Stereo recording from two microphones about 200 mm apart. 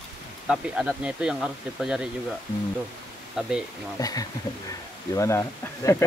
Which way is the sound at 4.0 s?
20° left (ahead or behind).